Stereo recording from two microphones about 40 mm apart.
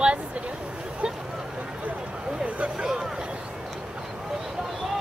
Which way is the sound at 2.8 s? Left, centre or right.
Centre.